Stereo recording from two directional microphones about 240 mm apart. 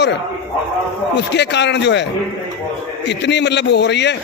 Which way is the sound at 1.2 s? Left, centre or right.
Left.